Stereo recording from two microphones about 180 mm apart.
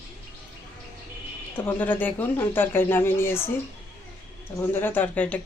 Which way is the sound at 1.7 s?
10° left (ahead or behind).